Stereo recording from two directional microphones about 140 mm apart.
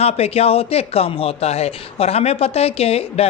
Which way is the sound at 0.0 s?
45° left (ahead or behind).